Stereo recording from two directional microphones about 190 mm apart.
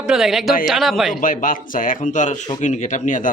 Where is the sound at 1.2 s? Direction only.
45° left (ahead or behind).